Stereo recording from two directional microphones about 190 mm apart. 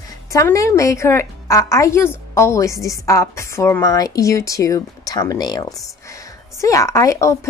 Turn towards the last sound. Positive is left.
turn(degrees=15)  # may be behind; listen again after turning